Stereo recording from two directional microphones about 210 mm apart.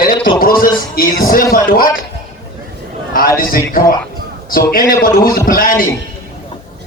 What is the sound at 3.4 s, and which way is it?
A man's voice, 45° left (ahead or behind).